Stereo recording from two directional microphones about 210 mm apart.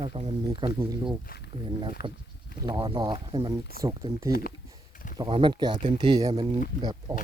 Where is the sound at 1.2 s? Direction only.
45° left (ahead or behind).